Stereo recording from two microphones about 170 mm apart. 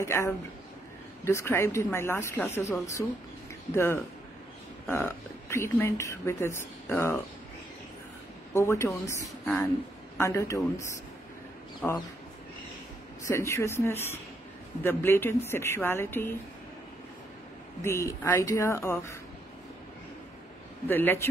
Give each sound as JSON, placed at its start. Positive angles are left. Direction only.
{"t": 0.0, "sound": "speech", "side_deg": 15}
{"t": 8.5, "sound": "speech", "side_deg": 15}
{"t": 10.1, "sound": "a man's voice", "side_deg": 20}
{"t": 11.8, "sound": "speech", "side_deg": 10}
{"t": 13.3, "sound": "speech", "side_deg": 15}
{"t": 17.8, "sound": "speech", "side_deg": 15}
{"t": 20.8, "sound": "speech", "side_deg": 10}